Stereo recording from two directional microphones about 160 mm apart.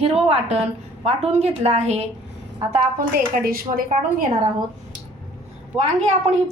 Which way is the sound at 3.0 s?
65° right (ahead or behind).